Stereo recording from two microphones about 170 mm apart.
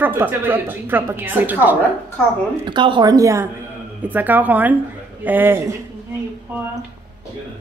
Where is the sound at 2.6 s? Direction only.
25° right (ahead or behind).